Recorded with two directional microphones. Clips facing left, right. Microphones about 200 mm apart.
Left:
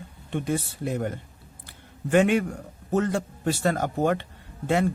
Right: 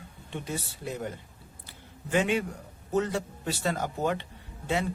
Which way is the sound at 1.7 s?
55° left (ahead or behind).